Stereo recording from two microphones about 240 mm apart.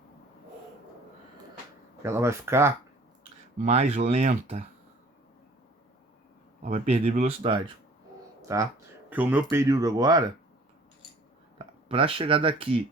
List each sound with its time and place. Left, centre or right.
2.0 s speech: centre
3.6 s speech: right
6.6 s speech: right
11.5 s speech: right